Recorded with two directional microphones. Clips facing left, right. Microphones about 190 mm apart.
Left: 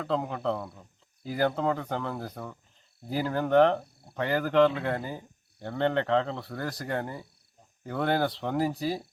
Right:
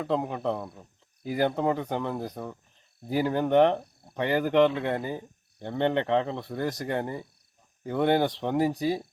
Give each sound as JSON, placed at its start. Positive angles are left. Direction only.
{"t": 0.0, "sound": "speech", "side_deg": -15}